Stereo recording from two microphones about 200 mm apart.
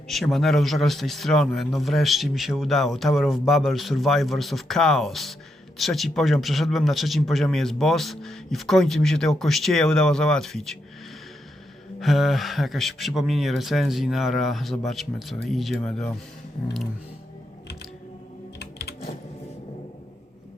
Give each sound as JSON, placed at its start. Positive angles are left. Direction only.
{"t": 0.1, "sound": "a man's voice", "side_deg": 0}
{"t": 11.9, "sound": "a man's voice", "side_deg": 0}
{"t": 18.6, "sound": "typing", "side_deg": 55}